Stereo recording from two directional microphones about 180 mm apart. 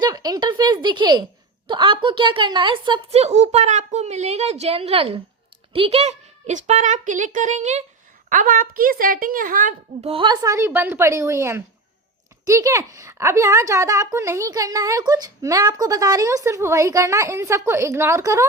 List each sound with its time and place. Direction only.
0.0 s a sound: 20° right (ahead or behind)
1.6 s a woman's voice: 30° right (ahead or behind)
8.3 s a woman's voice: 50° right (ahead or behind)
10.1 s speech: 25° right (ahead or behind)